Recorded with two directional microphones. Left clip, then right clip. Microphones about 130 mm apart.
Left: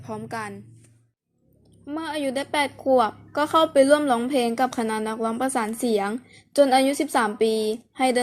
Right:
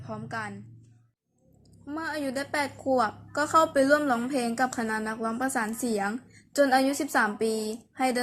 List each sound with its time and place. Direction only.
0.0 s a woman's voice: 20° left (ahead or behind)
1.9 s a woman's voice: 10° left (ahead or behind)